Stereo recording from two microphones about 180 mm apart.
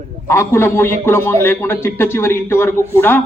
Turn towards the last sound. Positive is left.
turn(degrees=10)  # may be behind; listen again after turning